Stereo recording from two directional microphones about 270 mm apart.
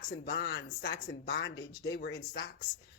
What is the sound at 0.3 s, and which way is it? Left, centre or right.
Speech, left.